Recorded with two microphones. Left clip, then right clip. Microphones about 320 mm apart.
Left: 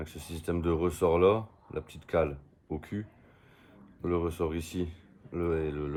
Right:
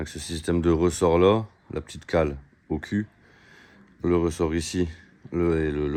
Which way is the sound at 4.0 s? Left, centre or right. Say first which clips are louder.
Right 7 dB; right.